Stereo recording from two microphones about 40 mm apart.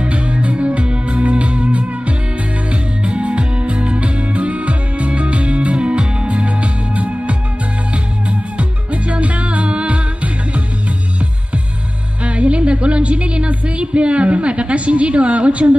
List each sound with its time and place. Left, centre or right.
0.0 s music: right
12.2 s music: right